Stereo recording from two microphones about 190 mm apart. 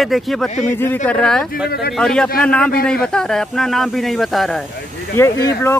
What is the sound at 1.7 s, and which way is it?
Speech, 55° left (ahead or behind).